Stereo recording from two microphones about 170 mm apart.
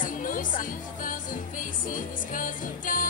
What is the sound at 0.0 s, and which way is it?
Music, 50° left (ahead or behind).